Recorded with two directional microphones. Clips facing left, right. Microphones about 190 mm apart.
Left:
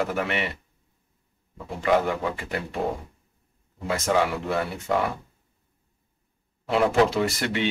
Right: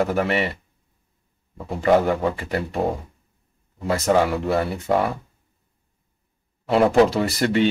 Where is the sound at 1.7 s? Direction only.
40° right (ahead or behind).